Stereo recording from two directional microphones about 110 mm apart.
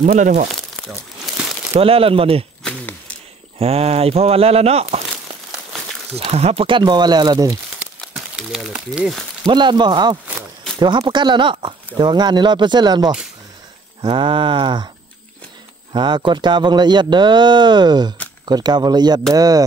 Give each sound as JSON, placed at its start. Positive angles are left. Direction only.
{"t": 0.1, "sound": "speech", "side_deg": -90}
{"t": 0.5, "sound": "crumpling", "side_deg": 0}
{"t": 1.8, "sound": "speech", "side_deg": -60}
{"t": 3.5, "sound": "speech", "side_deg": -65}
{"t": 8.1, "sound": "a sound", "side_deg": -5}
{"t": 8.7, "sound": "speech", "side_deg": -5}
{"t": 9.5, "sound": "speech", "side_deg": -45}
{"t": 15.9, "sound": "speech", "side_deg": -45}